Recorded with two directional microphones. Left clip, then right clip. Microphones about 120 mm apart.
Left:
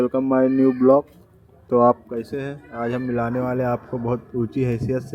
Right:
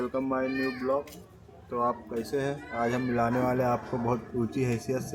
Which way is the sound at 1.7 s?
80° left.